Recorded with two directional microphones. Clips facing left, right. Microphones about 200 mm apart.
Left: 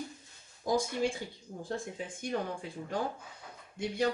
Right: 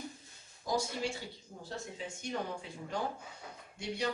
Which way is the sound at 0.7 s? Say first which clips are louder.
Left 5 dB; 50° left (ahead or behind).